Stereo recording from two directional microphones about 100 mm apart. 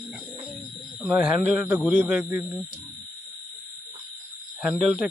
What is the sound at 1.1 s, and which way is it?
A man's voice, 15° right (ahead or behind).